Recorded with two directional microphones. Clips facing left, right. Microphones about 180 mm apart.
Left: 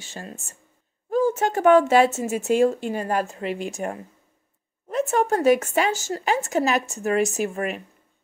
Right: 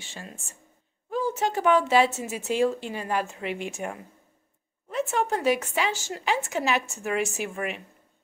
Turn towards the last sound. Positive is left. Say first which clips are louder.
# left 5 dB
turn(degrees=40)  # may be behind; listen again after turning